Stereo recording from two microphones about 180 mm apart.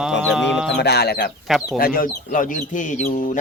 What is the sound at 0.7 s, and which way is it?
Speech, 65° left (ahead or behind).